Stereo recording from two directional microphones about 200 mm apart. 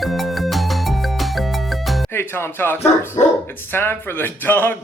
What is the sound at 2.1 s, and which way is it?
Speech, 10° left (ahead or behind).